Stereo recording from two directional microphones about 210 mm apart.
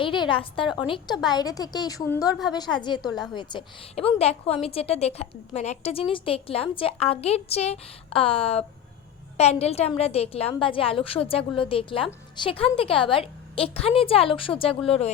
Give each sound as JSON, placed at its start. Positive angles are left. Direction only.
{"t": 0.0, "sound": "a woman's voice", "side_deg": 25}